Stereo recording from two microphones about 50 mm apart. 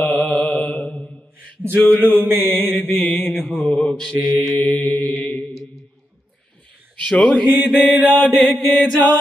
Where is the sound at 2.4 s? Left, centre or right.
Centre.